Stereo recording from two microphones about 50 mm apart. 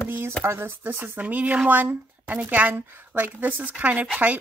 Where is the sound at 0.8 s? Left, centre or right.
Right.